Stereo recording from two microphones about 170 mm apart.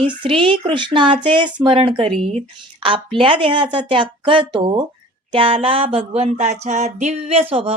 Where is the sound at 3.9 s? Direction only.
30° right (ahead or behind).